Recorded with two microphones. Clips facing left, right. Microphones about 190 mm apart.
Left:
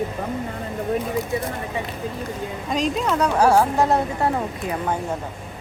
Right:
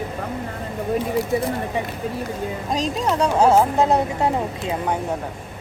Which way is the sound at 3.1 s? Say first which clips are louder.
Right 2 dB; 25° right (ahead or behind).